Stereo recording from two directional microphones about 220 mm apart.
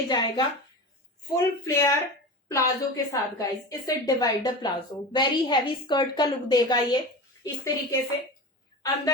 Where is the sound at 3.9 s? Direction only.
15° left (ahead or behind).